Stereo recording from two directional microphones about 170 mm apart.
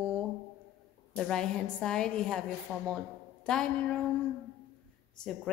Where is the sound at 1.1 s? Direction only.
5° left (ahead or behind).